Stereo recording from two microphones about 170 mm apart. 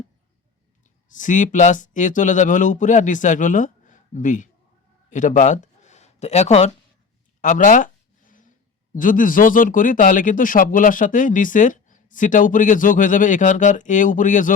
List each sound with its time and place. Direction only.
1.1 s speech: 50° left (ahead or behind)
7.4 s speech: 50° left (ahead or behind)
9.0 s speech: 50° left (ahead or behind)